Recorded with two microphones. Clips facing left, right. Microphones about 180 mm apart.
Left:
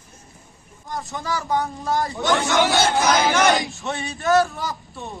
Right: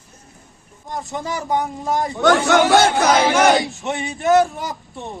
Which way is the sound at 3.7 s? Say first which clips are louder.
Right 3 dB; 20° right (ahead or behind).